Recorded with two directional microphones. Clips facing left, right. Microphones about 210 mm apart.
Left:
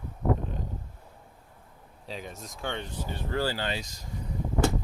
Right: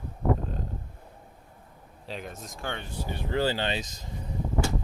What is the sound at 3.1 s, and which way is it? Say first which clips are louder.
Speech: right 3 dB; 20° right (ahead or behind).